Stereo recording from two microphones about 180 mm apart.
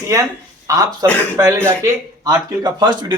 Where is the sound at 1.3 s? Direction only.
15° right (ahead or behind).